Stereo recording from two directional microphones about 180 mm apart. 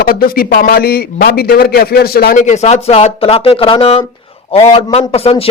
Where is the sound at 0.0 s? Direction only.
55° left (ahead or behind).